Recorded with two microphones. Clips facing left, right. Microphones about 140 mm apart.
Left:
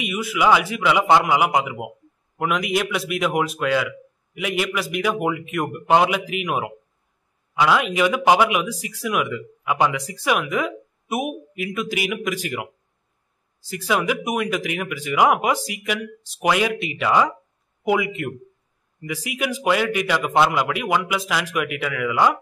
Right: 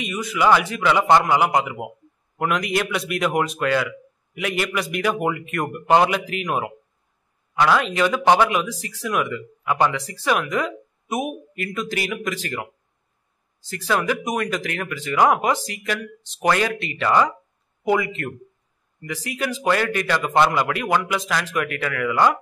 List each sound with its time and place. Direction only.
0.0 s a man's voice: 10° left (ahead or behind)